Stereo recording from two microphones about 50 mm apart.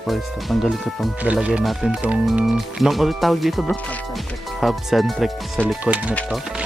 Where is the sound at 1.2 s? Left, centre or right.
Right.